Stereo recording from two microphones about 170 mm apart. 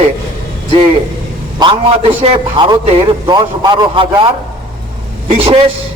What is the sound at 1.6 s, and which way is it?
A man's voice, 30° right (ahead or behind).